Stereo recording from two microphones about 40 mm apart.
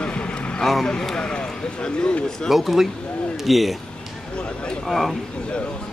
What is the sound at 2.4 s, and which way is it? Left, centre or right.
Speech, centre.